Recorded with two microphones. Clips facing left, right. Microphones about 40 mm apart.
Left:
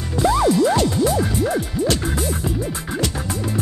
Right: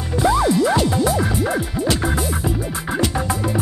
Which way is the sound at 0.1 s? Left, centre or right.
Centre.